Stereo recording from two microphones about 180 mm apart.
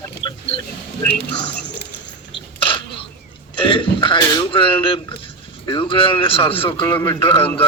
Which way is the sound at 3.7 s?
25° left (ahead or behind).